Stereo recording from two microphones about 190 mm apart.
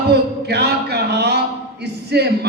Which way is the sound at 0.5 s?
60° right (ahead or behind).